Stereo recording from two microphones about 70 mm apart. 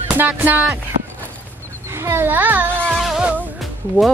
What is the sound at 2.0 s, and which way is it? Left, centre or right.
Speech, right.